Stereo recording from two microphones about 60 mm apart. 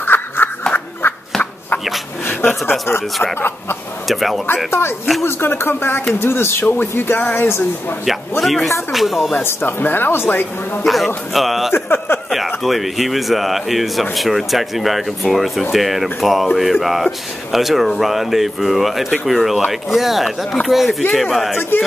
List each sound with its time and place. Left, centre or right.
0.0 s a sound: left
2.2 s speech: left
4.1 s a man's voice: centre
4.6 s speech: left
8.0 s a man's voice: centre
9.4 s speech: left
10.8 s a man's voice: centre
11.7 s a sound: left
12.4 s a man's voice: centre
21.5 s speech: left